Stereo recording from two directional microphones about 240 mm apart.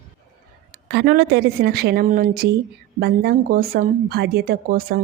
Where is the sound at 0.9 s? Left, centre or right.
Right.